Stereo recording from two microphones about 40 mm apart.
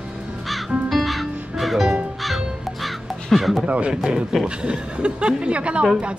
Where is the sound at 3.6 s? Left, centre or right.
Right.